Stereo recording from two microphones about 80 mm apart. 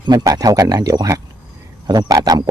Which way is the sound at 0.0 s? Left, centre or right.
Right.